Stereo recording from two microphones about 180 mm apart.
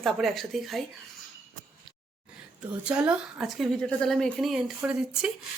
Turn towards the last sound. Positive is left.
turn(degrees=-5)  # may be behind; listen again after turning